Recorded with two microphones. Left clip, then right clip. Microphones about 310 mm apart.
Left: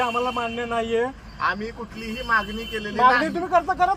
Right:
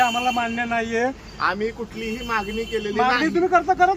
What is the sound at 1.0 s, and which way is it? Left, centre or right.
Speech, centre.